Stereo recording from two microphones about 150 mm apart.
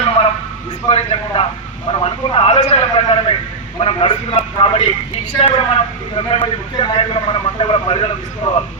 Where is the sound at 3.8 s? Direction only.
35° left (ahead or behind).